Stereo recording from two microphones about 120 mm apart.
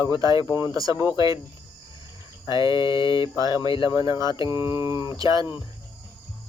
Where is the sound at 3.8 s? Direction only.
35° right (ahead or behind).